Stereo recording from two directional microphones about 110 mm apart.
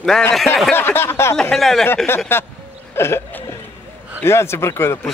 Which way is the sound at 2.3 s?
20° left (ahead or behind).